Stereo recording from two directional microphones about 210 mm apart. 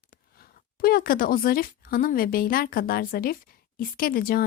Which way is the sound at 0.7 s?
45° left (ahead or behind).